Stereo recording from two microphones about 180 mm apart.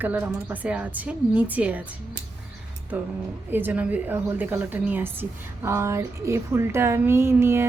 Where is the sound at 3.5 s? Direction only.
10° right (ahead or behind).